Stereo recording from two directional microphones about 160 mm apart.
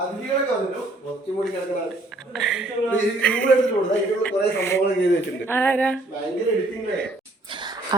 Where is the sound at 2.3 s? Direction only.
5° right (ahead or behind).